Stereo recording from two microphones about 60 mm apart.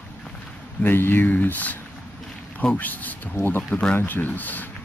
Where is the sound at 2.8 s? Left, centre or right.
Left.